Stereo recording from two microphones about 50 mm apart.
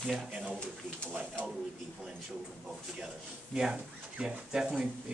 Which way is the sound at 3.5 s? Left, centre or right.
Centre.